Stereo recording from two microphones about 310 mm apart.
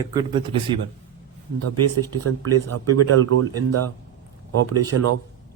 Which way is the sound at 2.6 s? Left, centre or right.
Right.